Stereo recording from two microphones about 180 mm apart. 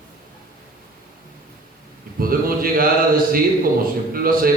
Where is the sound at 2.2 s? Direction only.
55° right (ahead or behind).